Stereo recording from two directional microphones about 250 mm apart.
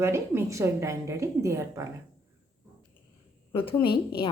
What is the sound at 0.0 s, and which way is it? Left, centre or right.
A woman's voice, centre.